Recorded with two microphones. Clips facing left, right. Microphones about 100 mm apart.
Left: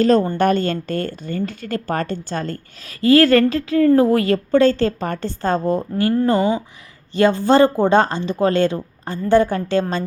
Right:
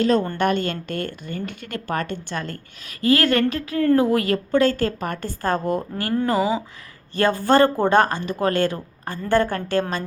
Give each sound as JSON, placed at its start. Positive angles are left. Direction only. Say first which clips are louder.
{"t": 0.0, "sound": "a woman's voice", "louder": "left 4 dB", "side_deg": 40}
{"t": 6.3, "sound": "speech", "louder": "left 3 dB", "side_deg": -10}
{"t": 7.1, "sound": "a woman's voice", "louder": "left 3 dB", "side_deg": 20}